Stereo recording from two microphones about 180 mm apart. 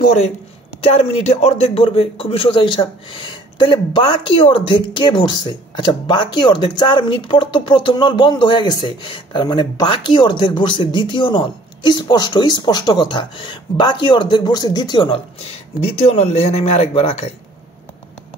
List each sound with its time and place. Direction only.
0.8 s speech: 35° left (ahead or behind)